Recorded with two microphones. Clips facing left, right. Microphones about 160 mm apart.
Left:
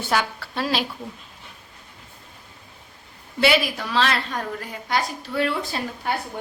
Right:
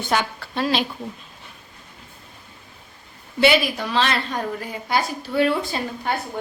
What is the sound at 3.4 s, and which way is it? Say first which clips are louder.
A woman's voice: right 2 dB; centre (ahead or behind).